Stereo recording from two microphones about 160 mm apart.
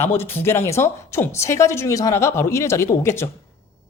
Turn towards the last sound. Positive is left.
turn(degrees=15)  # may be behind; listen again after turning